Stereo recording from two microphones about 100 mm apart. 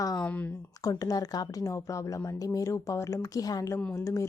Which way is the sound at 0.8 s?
35° left (ahead or behind).